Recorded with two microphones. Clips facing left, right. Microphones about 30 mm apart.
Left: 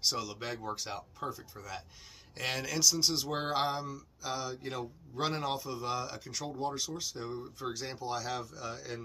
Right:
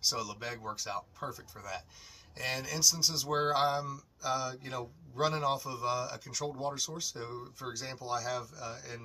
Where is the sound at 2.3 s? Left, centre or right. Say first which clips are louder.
Left 1 dB; left.